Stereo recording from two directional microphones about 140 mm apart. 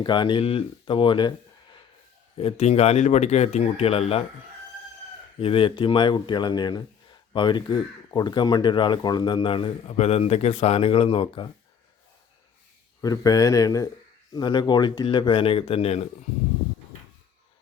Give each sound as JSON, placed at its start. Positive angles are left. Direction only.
{"t": 0.0, "sound": "speech", "side_deg": 35}
{"t": 2.4, "sound": "speech", "side_deg": 45}
{"t": 5.4, "sound": "speech", "side_deg": 40}
{"t": 13.0, "sound": "speech", "side_deg": 25}